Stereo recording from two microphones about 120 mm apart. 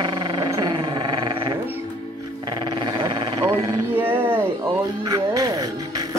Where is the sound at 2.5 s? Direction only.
40° right (ahead or behind).